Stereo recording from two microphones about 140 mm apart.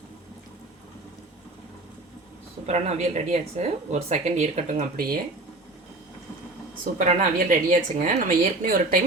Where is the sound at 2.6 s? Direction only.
50° right (ahead or behind); by 5.2 s 80° right.